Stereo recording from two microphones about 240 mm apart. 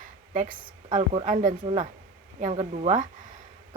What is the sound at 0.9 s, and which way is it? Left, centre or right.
A woman's voice, right.